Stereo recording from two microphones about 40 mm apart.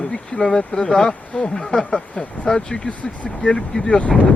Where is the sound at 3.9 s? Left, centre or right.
Left.